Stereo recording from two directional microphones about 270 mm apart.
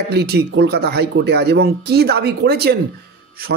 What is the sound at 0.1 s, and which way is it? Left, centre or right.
Speech, right.